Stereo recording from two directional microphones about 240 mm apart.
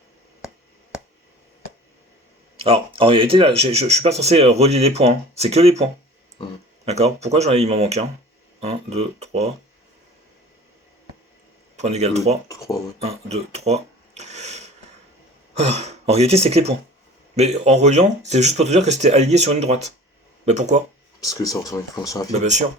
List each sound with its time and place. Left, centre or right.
0.9 s a sound: centre
2.6 s speech: right
11.8 s speech: right
12.5 s speech: centre
13.3 s a sound: right
15.5 s speech: right
21.2 s speech: centre
22.4 s speech: right